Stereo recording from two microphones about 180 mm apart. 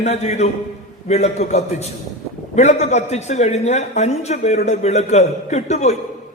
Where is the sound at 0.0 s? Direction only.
35° left (ahead or behind).